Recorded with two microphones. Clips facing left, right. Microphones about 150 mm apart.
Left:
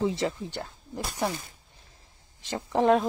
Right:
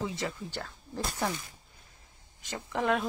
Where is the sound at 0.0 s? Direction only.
25° left (ahead or behind).